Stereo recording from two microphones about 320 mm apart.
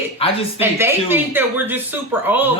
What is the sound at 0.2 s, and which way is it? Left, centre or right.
Speech, centre.